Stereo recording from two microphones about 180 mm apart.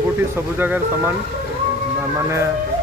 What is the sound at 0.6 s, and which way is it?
Speech, 10° right (ahead or behind).